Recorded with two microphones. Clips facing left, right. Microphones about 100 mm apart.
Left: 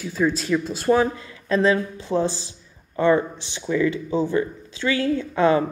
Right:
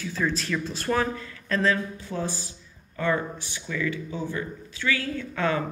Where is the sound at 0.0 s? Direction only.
15° left (ahead or behind).